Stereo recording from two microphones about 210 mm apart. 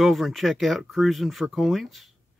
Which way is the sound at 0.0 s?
Centre (ahead or behind).